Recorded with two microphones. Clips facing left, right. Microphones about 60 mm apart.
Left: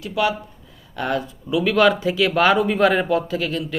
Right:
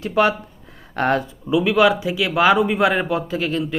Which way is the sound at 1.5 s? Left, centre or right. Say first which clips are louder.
Right 1 dB; centre.